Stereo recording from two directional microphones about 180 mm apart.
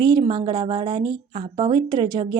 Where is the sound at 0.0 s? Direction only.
25° right (ahead or behind).